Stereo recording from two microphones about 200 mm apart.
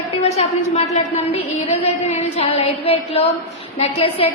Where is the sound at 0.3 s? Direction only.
30° left (ahead or behind).